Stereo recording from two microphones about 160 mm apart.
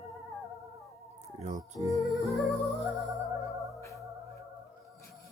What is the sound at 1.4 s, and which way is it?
Music, 45° right (ahead or behind).